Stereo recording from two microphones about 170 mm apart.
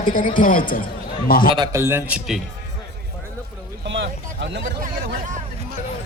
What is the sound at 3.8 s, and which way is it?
Speech, 85° right.